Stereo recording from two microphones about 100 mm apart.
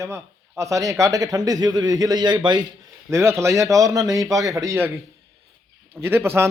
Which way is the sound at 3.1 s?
25° right (ahead or behind).